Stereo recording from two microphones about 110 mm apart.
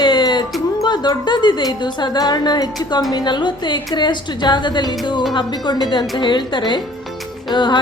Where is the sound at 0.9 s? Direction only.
45° left (ahead or behind).